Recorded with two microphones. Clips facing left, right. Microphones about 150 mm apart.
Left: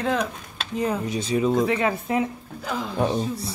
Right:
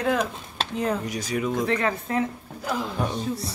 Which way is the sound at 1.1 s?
25° left (ahead or behind).